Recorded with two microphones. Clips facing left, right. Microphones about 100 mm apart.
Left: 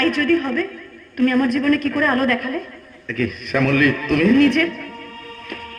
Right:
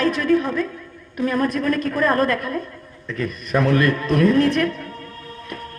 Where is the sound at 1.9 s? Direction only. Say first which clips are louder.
Even; 40° right (ahead or behind).